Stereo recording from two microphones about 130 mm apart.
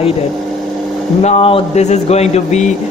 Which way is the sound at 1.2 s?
45° left (ahead or behind).